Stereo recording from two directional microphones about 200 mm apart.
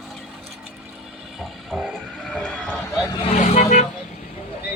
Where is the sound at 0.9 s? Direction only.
Centre (ahead or behind).